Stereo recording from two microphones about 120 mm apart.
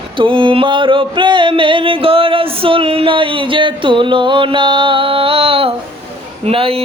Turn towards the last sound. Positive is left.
turn(degrees=-50)  # may be behind; listen again after turning